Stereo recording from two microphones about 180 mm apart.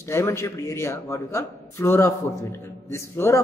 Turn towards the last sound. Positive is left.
turn(degrees=15)  # may be behind; listen again after turning